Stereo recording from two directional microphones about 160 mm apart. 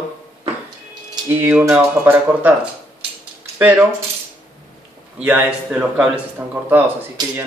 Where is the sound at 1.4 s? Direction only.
10° right (ahead or behind).